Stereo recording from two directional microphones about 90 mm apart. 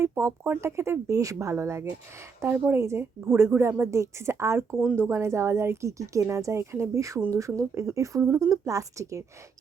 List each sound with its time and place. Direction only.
0.0 s speech: 30° right (ahead or behind)
2.4 s a woman's voice: 20° right (ahead or behind); by 9.2 s 35° right (ahead or behind)